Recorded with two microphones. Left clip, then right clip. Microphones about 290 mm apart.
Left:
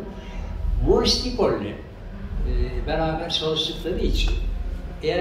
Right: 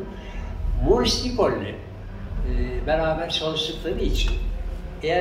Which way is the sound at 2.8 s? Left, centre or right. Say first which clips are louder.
Right 3 dB; centre.